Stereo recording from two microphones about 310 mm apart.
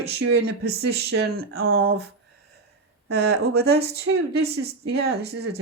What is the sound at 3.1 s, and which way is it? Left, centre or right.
Speech, right.